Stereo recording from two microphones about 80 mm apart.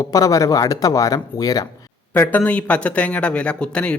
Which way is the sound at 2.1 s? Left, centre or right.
Left.